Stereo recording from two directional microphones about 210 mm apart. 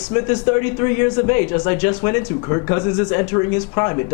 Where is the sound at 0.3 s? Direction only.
10° left (ahead or behind).